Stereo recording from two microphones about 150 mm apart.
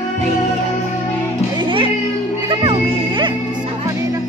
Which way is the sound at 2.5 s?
35° right (ahead or behind).